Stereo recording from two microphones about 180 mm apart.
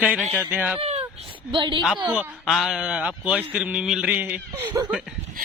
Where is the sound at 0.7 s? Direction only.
35° right (ahead or behind).